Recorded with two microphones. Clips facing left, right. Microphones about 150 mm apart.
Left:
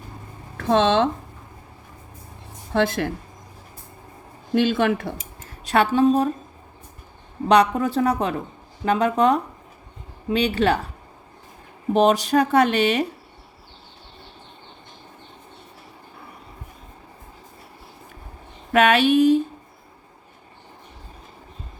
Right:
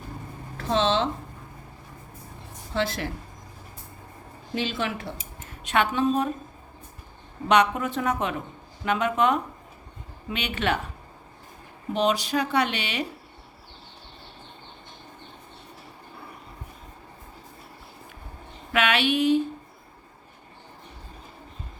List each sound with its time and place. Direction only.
0.5 s speech: 55° left (ahead or behind)
2.7 s speech: 55° left (ahead or behind)
4.5 s speech: 55° left (ahead or behind)
5.6 s speech: 35° left (ahead or behind)
7.4 s speech: 35° left (ahead or behind)
11.9 s speech: 45° left (ahead or behind)
18.7 s speech: 45° left (ahead or behind)